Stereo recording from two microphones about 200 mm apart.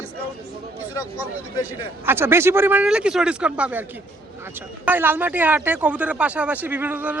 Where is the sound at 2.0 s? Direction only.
10° right (ahead or behind).